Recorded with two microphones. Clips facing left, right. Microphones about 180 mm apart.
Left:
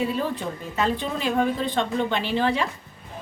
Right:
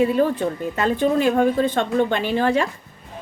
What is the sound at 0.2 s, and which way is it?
A woman's voice, 50° right (ahead or behind).